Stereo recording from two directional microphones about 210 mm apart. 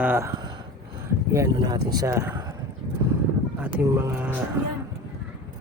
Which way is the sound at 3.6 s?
10° right (ahead or behind).